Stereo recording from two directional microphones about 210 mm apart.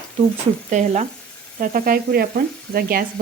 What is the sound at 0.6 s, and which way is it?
Speech, 35° right (ahead or behind).